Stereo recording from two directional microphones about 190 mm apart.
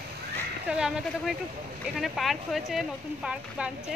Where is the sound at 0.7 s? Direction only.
5° right (ahead or behind).